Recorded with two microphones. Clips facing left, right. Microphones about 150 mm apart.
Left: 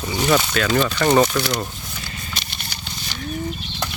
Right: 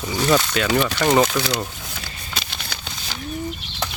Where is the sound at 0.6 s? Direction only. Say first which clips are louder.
Left 1 dB; 15° right (ahead or behind).